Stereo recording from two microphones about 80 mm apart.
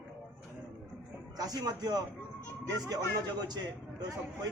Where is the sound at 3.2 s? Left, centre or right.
Right.